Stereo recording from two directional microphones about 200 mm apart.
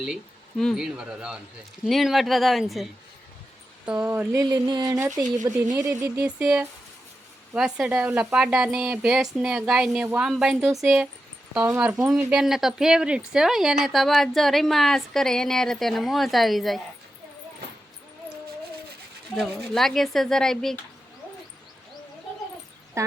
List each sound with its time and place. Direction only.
0.6 s a woman's voice: centre (ahead or behind)
3.9 s a woman's voice: 10° right (ahead or behind)
19.4 s a woman's voice: centre (ahead or behind)
23.0 s speech: 15° right (ahead or behind)